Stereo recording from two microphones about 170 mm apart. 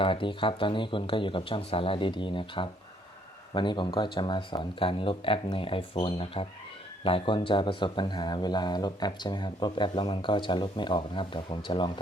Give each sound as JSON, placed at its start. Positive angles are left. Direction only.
{"t": 0.0, "sound": "speech", "side_deg": 30}